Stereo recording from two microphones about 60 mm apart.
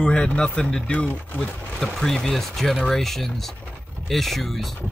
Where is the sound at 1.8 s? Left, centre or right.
Centre.